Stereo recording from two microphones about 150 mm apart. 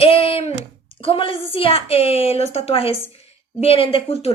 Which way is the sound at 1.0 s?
35° left (ahead or behind).